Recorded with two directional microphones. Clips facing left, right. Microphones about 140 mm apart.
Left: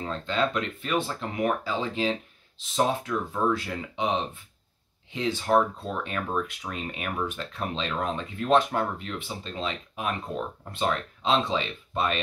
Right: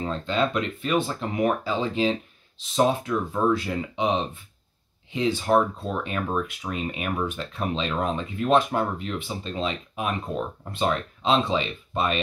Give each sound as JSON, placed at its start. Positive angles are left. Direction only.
{"t": 0.0, "sound": "speech", "side_deg": -20}
{"t": 5.1, "sound": "speech", "side_deg": -15}